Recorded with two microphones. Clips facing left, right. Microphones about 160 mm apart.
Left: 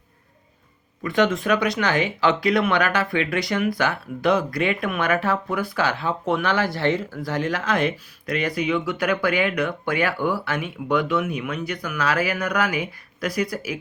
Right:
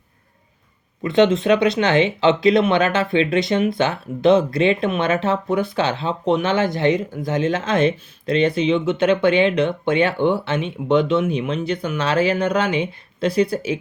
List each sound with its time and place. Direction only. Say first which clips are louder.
1.0 s speech: right 5 dB; 25° right (ahead or behind)